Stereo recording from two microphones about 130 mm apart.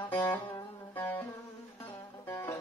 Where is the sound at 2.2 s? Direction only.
20° left (ahead or behind).